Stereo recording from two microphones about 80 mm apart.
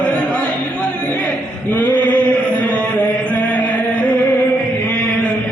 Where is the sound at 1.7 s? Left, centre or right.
Centre.